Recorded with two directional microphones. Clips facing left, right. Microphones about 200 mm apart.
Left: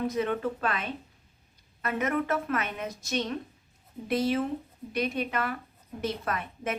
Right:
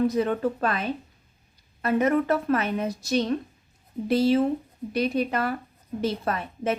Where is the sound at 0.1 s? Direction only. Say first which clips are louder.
Right 4 dB; 35° right (ahead or behind).